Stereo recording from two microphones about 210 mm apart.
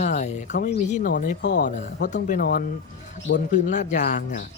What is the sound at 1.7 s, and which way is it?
Speech, 35° left (ahead or behind).